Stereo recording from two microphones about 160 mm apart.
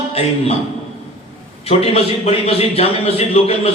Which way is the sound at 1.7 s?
40° left (ahead or behind).